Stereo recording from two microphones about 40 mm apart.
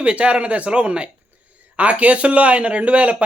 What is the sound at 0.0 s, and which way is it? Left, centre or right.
A man's voice, right.